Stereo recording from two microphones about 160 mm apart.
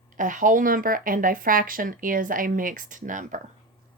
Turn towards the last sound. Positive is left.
turn(degrees=-55)  # may be behind; listen again after turning